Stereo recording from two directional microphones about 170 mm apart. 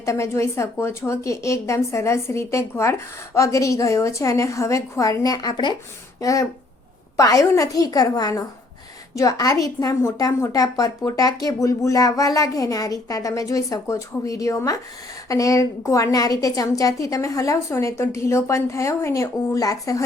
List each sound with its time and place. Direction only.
0.0 s a woman's voice: 15° left (ahead or behind)